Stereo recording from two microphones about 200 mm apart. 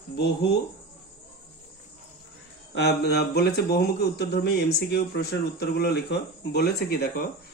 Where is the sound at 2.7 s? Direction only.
55° left (ahead or behind).